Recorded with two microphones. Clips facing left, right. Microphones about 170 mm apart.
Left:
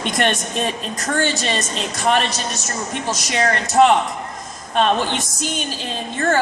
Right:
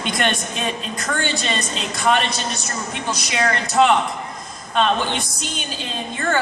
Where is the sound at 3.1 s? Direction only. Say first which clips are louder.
Left 1 dB; 45° left (ahead or behind).